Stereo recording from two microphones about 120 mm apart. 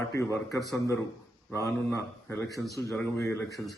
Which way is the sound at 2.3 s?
25° left (ahead or behind).